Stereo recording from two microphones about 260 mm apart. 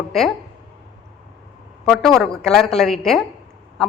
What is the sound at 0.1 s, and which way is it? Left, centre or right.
Speech, centre.